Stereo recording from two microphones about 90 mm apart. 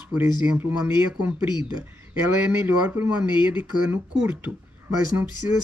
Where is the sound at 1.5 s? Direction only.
55° left (ahead or behind).